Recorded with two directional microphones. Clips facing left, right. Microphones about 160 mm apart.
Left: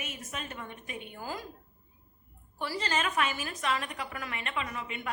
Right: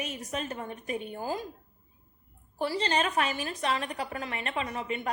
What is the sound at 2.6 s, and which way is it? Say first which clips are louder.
A woman's voice: right 4 dB; 30° right (ahead or behind).